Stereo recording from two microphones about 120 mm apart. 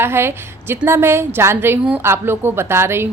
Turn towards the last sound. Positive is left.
turn(degrees=-20)  # may be behind; listen again after turning